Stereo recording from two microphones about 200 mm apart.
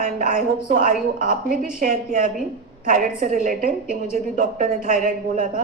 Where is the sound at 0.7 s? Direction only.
40° right (ahead or behind).